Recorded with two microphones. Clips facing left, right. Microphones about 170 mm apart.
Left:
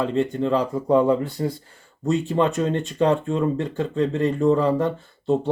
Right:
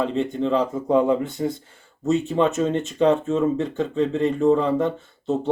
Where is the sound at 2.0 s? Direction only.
Centre (ahead or behind).